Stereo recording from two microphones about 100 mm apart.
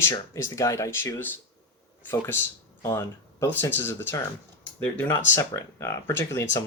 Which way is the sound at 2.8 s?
30° left (ahead or behind).